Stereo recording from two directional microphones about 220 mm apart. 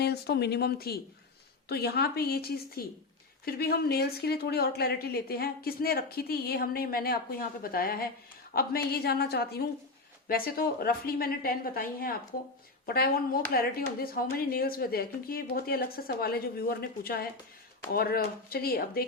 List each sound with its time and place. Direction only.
0.0 s a woman's voice: 50° left (ahead or behind)